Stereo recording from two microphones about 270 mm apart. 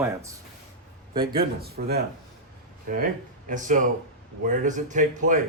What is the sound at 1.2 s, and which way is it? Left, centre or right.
Speech, right.